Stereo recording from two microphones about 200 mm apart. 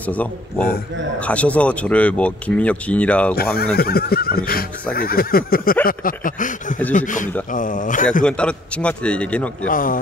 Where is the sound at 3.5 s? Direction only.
50° left (ahead or behind).